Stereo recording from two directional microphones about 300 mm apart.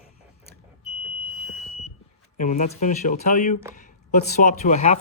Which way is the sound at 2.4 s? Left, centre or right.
Left.